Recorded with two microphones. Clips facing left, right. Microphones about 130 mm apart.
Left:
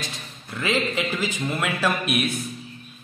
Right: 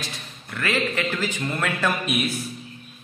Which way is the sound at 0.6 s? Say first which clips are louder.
Left 1 dB; 15° left (ahead or behind).